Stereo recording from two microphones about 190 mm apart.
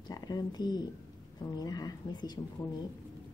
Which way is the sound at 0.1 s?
20° left (ahead or behind).